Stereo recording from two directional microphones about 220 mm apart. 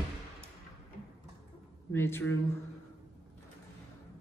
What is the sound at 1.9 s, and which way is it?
Speech, 10° left (ahead or behind).